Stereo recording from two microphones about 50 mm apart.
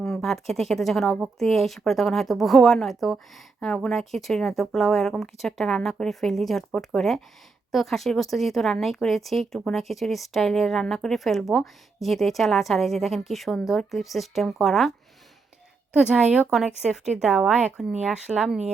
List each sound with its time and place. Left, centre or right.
0.0 s speech: centre
7.7 s speech: centre
16.0 s speech: centre